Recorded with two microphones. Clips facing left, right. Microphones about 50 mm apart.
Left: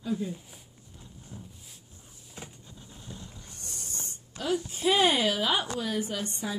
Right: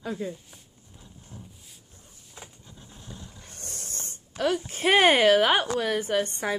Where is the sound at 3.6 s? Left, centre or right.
Right.